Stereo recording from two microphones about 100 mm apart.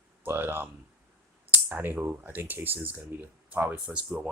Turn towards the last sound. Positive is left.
turn(degrees=-10)  # may be behind; listen again after turning